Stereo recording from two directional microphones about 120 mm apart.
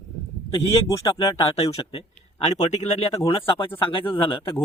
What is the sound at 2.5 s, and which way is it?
Speech, 75° left (ahead or behind).